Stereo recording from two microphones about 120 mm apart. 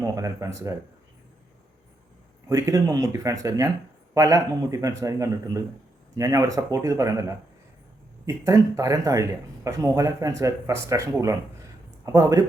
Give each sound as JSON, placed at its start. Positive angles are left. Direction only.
{"t": 0.0, "sound": "a man's voice", "side_deg": -25}
{"t": 2.5, "sound": "a man's voice", "side_deg": -25}